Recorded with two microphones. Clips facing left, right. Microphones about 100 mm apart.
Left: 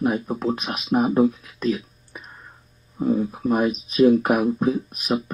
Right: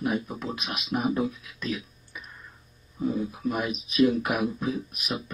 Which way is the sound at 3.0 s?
45° left (ahead or behind).